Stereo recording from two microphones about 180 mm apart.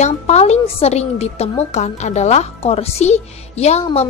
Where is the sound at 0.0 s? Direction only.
40° left (ahead or behind).